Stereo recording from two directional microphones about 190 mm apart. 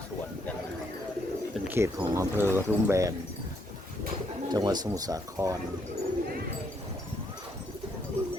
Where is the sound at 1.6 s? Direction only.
15° right (ahead or behind).